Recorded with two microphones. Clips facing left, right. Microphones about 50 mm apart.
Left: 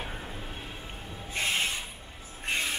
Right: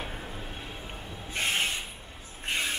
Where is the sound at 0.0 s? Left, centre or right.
Centre.